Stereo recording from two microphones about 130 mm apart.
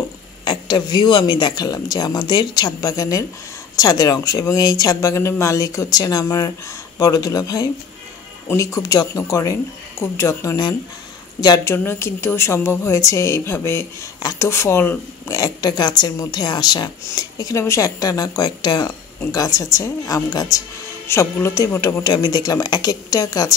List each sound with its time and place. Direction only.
0.5 s a woman's voice: 35° left (ahead or behind)